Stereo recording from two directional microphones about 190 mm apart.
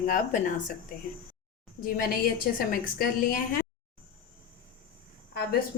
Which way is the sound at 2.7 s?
50° left (ahead or behind).